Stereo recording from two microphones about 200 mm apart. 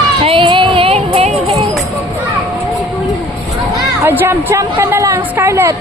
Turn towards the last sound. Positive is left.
turn(degrees=-15)  # may be behind; listen again after turning